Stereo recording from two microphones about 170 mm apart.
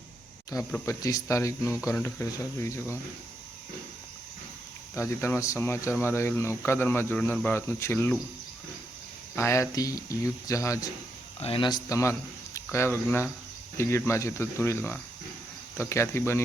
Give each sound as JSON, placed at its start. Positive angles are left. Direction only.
{"t": 0.5, "sound": "speech", "side_deg": 20}
{"t": 4.9, "sound": "speech", "side_deg": 15}
{"t": 9.3, "sound": "speech", "side_deg": 15}
{"t": 11.3, "sound": "speech", "side_deg": 35}